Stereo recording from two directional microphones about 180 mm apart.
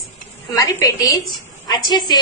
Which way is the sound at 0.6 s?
20° left (ahead or behind).